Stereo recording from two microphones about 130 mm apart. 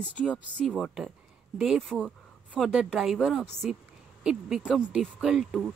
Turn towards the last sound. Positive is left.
turn(degrees=0)  # may be behind; listen again after turning